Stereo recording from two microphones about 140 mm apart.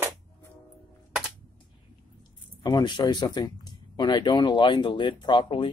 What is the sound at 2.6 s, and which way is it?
Speech, 30° left (ahead or behind).